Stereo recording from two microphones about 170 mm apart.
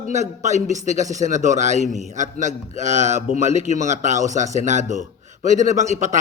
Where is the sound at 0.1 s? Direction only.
45° right (ahead or behind).